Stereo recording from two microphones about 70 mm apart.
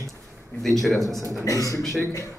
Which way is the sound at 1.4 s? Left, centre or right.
Left.